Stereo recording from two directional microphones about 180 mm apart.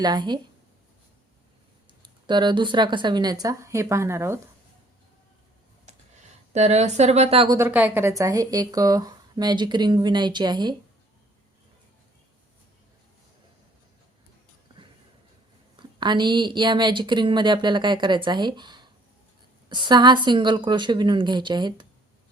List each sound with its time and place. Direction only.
0.0 s a woman's voice: 25° right (ahead or behind)
2.0 s a woman's voice: 25° right (ahead or behind)
6.5 s speech: 40° right (ahead or behind)
7.5 s a woman's voice: 10° right (ahead or behind)
15.7 s a woman's voice: 25° right (ahead or behind)